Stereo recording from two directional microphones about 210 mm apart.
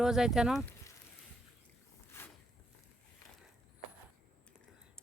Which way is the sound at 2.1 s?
15° left (ahead or behind).